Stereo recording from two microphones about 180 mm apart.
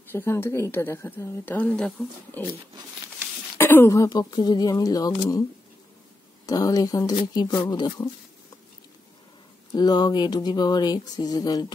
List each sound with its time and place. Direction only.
0.1 s a woman's voice: 15° left (ahead or behind)
3.5 s speech: 10° left (ahead or behind)
6.4 s speech: 20° left (ahead or behind)
9.7 s speech: 25° left (ahead or behind)